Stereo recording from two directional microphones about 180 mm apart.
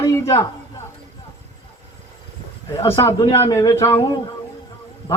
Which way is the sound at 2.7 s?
15° left (ahead or behind).